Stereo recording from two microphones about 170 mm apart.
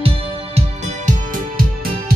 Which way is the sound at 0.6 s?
45° right (ahead or behind).